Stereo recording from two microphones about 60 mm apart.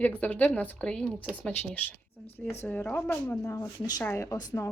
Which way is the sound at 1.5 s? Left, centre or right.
Left.